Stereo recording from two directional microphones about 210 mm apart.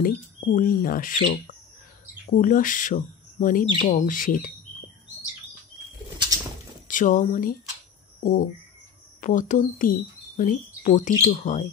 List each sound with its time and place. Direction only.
0.0 s speech: 45° left (ahead or behind)
6.9 s speech: 40° left (ahead or behind)
8.2 s a sound: 40° left (ahead or behind)
9.2 s speech: 40° left (ahead or behind)